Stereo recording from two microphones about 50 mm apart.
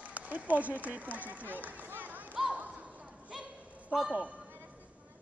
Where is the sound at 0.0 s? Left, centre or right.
Right.